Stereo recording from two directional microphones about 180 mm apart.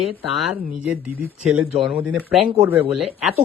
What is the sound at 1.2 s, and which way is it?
Speech, 5° right (ahead or behind).